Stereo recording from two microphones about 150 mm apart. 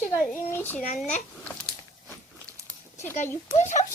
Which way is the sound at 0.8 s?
55° left (ahead or behind).